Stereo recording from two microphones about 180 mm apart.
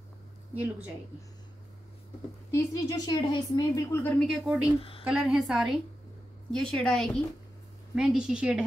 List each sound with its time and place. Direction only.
2.5 s a woman's voice: 20° left (ahead or behind)
4.2 s a woman's voice: centre (ahead or behind)